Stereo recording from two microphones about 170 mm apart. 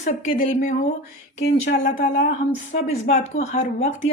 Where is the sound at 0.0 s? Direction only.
50° left (ahead or behind).